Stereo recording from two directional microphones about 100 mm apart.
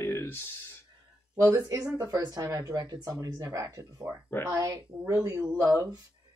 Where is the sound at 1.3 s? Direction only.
30° right (ahead or behind).